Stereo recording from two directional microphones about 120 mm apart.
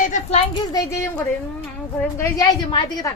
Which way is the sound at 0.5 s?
35° left (ahead or behind).